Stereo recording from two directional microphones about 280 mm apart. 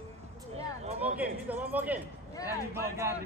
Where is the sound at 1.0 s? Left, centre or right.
Centre.